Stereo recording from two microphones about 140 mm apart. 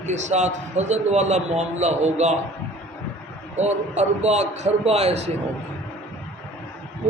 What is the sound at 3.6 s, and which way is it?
A man's voice, 55° right (ahead or behind).